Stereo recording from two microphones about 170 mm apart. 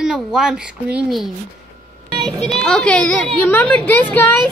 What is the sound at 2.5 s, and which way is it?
A woman's voice, 5° left (ahead or behind).